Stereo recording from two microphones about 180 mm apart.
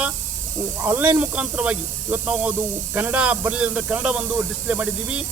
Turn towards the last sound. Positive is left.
turn(degrees=-5)  # may be behind; listen again after turning